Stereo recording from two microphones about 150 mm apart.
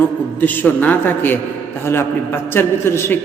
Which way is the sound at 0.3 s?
10° left (ahead or behind).